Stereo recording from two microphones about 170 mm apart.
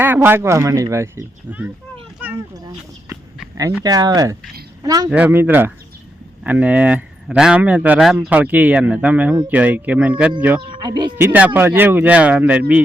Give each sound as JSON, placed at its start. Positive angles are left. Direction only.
{"t": 0.0, "sound": "speech", "side_deg": -10}
{"t": 2.2, "sound": "a sound", "side_deg": -10}
{"t": 3.8, "sound": "speech", "side_deg": -20}
{"t": 5.0, "sound": "speech", "side_deg": -10}
{"t": 10.7, "sound": "speech", "side_deg": -25}
{"t": 11.2, "sound": "speech", "side_deg": -10}